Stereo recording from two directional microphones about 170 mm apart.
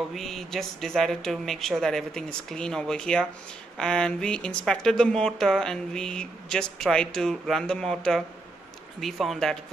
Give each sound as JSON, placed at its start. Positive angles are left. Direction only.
{"t": 0.1, "sound": "speech", "side_deg": 0}